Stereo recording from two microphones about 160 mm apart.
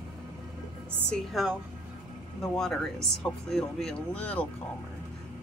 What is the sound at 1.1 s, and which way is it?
Speech, centre (ahead or behind).